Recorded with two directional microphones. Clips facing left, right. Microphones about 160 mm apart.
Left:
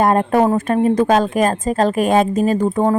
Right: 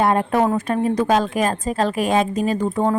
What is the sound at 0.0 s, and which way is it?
A woman's voice, 45° left (ahead or behind).